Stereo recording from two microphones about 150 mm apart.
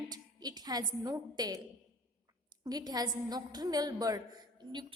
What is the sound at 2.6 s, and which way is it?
A woman's voice, 25° right (ahead or behind).